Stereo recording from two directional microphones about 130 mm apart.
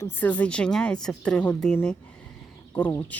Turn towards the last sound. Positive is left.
turn(degrees=15)  # may be behind; listen again after turning